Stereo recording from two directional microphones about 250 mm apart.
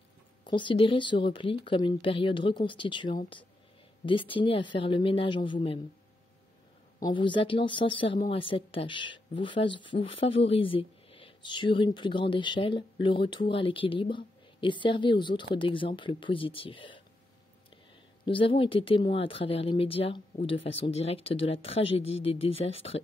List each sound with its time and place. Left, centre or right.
0.4 s speech: centre
7.0 s speech: centre
18.2 s speech: centre